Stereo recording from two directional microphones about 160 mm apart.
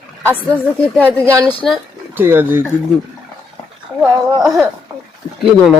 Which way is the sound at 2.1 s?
15° right (ahead or behind).